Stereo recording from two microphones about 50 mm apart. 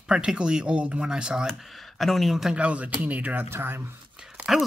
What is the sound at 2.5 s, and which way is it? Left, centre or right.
Speech, right.